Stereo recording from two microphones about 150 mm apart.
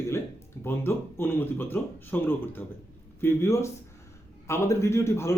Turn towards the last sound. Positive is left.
turn(degrees=15)  # may be behind; listen again after turning